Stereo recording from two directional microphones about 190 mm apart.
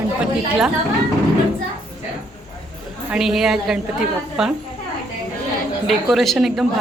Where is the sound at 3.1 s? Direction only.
Centre (ahead or behind).